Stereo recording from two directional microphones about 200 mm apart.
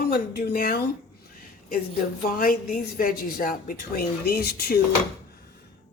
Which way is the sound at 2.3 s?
45° left (ahead or behind).